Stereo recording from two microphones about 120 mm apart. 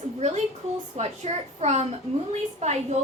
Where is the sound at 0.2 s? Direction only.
65° right (ahead or behind).